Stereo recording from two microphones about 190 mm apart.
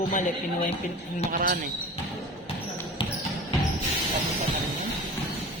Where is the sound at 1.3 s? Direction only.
50° right (ahead or behind).